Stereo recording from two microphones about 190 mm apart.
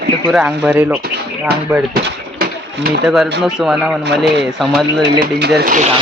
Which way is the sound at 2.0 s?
55° right (ahead or behind).